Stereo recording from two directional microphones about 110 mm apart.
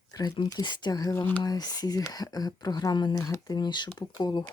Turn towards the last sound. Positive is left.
turn(degrees=40)  # may be behind; listen again after turning